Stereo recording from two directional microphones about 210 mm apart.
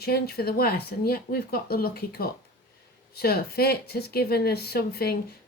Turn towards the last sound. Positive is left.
turn(degrees=50)  # may be behind; listen again after turning